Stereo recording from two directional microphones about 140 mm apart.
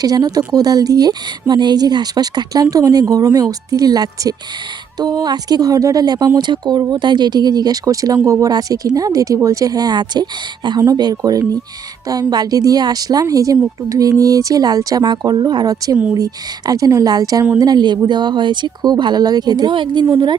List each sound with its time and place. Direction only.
0.0 s speech: 25° right (ahead or behind)